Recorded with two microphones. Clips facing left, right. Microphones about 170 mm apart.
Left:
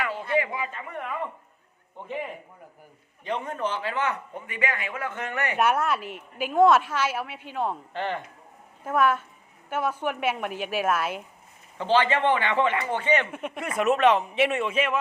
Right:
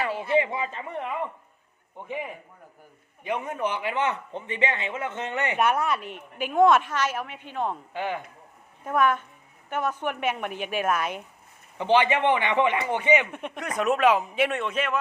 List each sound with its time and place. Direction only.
0.3 s a man's voice: 25° right (ahead or behind)
5.5 s a woman's voice: 5° left (ahead or behind)
7.9 s a man's voice: 10° right (ahead or behind)
8.8 s a woman's voice: 5° left (ahead or behind)
11.8 s a man's voice: 15° right (ahead or behind)
13.3 s a woman's voice: 5° left (ahead or behind)